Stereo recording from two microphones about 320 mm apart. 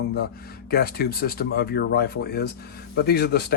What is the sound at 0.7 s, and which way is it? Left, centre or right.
Speech, left.